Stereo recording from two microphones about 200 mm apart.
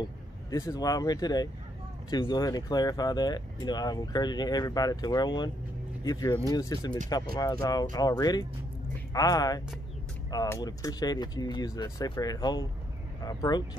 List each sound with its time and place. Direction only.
0.0 s speech: 15° left (ahead or behind)